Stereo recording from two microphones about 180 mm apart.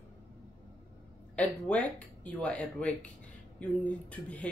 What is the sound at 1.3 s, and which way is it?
Speech, 5° left (ahead or behind).